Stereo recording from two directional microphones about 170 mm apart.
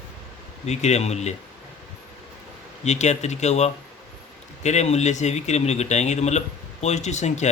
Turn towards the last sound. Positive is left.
turn(degrees=45)  # may be behind; listen again after turning